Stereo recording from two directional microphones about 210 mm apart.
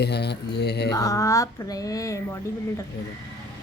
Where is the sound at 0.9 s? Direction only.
15° left (ahead or behind).